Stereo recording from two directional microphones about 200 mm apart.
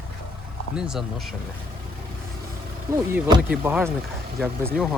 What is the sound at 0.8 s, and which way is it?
Speech, centre (ahead or behind).